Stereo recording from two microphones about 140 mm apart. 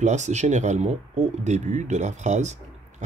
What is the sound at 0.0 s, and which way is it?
Speech, 55° right (ahead or behind).